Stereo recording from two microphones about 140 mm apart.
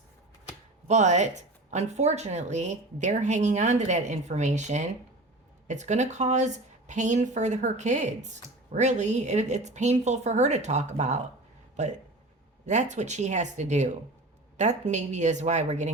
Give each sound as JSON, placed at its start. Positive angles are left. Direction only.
{"t": 0.9, "sound": "speech", "side_deg": -55}